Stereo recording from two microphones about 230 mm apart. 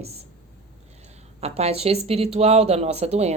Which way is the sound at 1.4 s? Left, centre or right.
Right.